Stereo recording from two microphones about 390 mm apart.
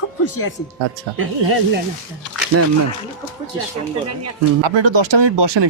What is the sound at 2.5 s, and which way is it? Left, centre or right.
Speech, right.